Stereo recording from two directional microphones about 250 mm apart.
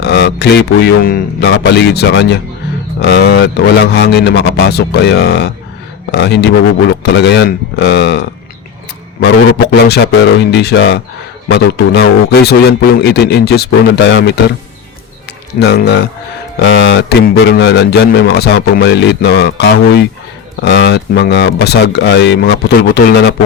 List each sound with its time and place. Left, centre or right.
0.0 s a man's voice: left
15.5 s a man's voice: left